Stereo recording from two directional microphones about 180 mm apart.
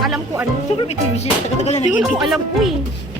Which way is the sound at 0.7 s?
35° left (ahead or behind).